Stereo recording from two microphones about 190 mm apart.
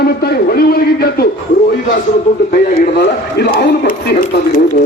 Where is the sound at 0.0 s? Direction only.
55° left (ahead or behind).